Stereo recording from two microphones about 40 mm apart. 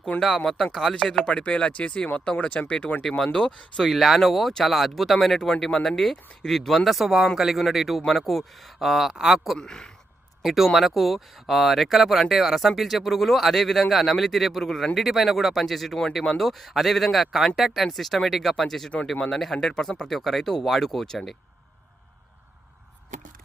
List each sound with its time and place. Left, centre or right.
0.1 s speech: left
0.4 s speech: centre
1.2 s speech: left
3.0 s speech: centre
3.8 s speech: centre
9.6 s speech: centre
10.4 s speech: centre
14.9 s speech: centre